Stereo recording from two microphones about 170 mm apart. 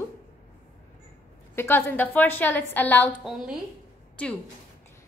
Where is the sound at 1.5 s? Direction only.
15° left (ahead or behind).